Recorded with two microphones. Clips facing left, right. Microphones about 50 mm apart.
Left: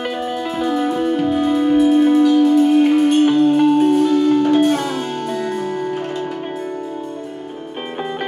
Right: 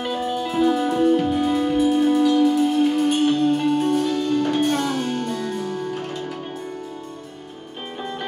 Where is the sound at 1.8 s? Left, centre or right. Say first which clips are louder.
Left 5 dB; centre.